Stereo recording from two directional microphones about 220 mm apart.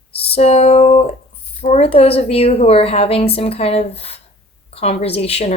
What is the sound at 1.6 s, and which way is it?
Speech, 30° left (ahead or behind).